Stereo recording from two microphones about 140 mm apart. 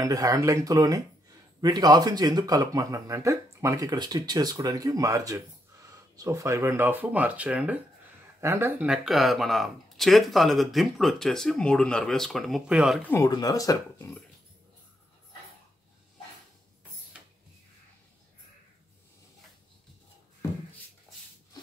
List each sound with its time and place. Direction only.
0.0 s speech: 25° right (ahead or behind); by 13.0 s 5° right (ahead or behind)
13.3 s speech: 25° left (ahead or behind)
13.9 s speech: 15° left (ahead or behind)